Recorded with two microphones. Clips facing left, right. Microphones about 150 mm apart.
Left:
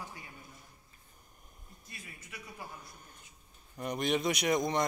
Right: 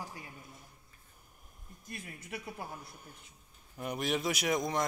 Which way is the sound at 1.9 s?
60° right (ahead or behind).